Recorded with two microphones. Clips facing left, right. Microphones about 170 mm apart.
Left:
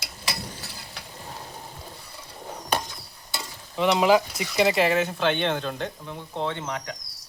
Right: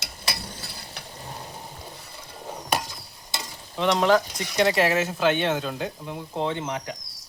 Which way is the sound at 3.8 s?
5° left (ahead or behind).